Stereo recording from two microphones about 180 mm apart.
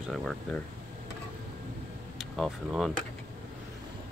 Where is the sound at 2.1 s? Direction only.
Centre (ahead or behind).